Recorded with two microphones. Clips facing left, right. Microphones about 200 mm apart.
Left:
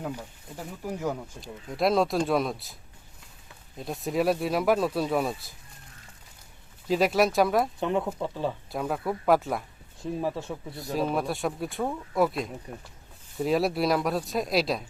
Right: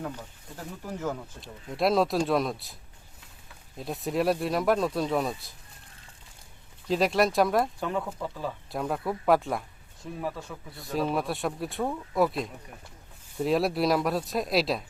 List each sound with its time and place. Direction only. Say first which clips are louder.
0.0 s speech: left 2 dB; 10° left (ahead or behind)
1.4 s speech: right 1 dB; centre (ahead or behind)
3.8 s speech: left 1 dB; centre (ahead or behind)
6.8 s speech: left 1 dB; centre (ahead or behind)
7.8 s speech: left 4 dB; 20° left (ahead or behind)
8.7 s speech: left 1 dB; centre (ahead or behind)
10.0 s speech: left 5 dB; 25° left (ahead or behind)
10.8 s speech: even; centre (ahead or behind)
12.7 s speech: left 7 dB; 30° left (ahead or behind)
13.4 s speech: even; centre (ahead or behind)